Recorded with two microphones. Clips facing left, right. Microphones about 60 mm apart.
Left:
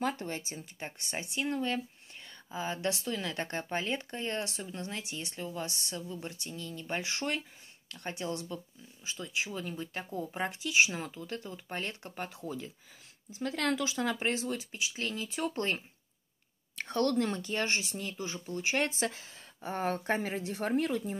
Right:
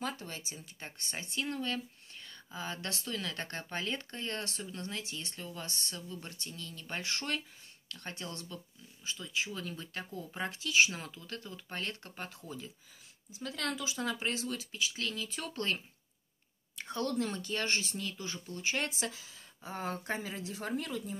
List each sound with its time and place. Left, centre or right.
0.1 s speech: left
13.3 s speech: left
16.7 s speech: left
17.2 s speech: left
17.6 s speech: centre
18.8 s speech: left